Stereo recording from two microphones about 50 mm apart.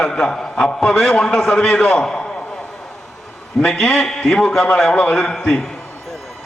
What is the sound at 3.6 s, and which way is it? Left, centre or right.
A man's voice, centre.